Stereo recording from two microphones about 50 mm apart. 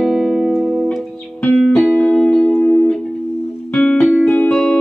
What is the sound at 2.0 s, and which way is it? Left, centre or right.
Music, centre.